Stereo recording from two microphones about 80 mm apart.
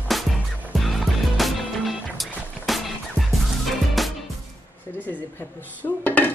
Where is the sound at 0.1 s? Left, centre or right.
Centre.